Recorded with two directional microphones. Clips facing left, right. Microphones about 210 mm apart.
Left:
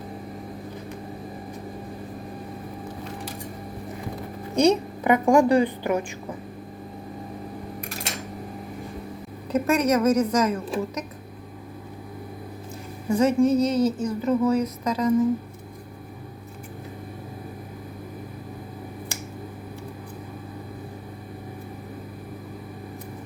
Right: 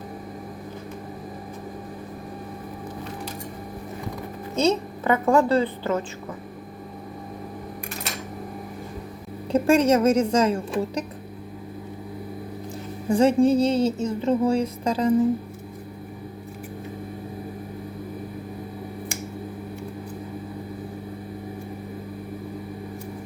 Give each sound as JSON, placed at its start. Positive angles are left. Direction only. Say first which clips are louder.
{"t": 4.5, "sound": "a woman's voice", "louder": "left 2 dB", "side_deg": 15}
{"t": 9.5, "sound": "speech", "louder": "right 3 dB", "side_deg": -30}
{"t": 13.1, "sound": "speech", "louder": "right 2 dB", "side_deg": -30}